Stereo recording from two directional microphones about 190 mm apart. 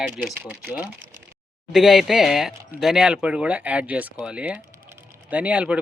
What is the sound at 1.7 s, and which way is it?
Speech, centre (ahead or behind).